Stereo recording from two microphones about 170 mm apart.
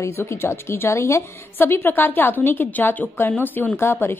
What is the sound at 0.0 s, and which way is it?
A woman's voice, 15° left (ahead or behind).